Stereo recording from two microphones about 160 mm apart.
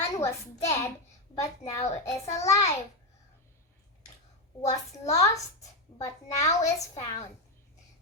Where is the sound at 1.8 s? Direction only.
45° left (ahead or behind).